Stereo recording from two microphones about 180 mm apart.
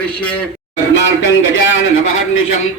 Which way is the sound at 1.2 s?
90° left.